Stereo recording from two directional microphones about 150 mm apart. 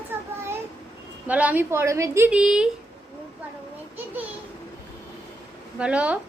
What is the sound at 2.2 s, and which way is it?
Speech, 5° right (ahead or behind).